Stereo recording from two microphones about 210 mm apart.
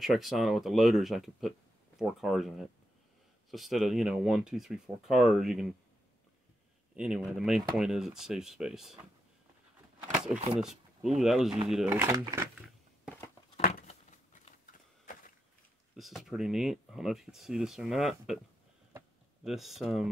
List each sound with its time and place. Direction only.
0.0 s speech: centre (ahead or behind)
7.0 s speech: 5° right (ahead or behind)
10.6 s speech: centre (ahead or behind)
13.6 s a sound: 45° left (ahead or behind)
16.0 s speech: centre (ahead or behind)
19.4 s speech: centre (ahead or behind)